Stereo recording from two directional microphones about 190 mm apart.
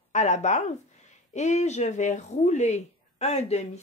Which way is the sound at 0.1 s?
40° left (ahead or behind).